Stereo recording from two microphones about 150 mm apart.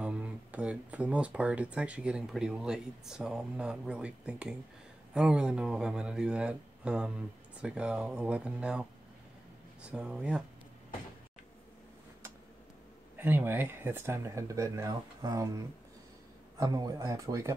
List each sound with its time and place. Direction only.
0.0 s speech: 10° right (ahead or behind)
13.1 s speech: 15° right (ahead or behind)